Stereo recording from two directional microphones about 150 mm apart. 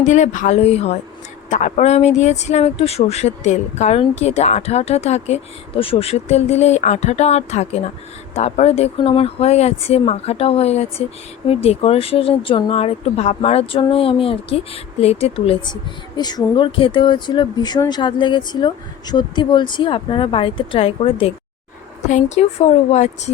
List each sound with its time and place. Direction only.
0.0 s speech: 55° left (ahead or behind)